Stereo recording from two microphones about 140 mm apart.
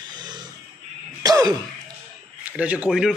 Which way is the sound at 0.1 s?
30° right (ahead or behind).